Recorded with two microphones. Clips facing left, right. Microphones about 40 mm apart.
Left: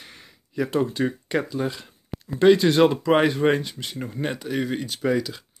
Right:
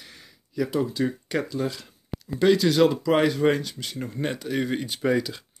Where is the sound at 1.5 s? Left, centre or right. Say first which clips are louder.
Left 1 dB; left.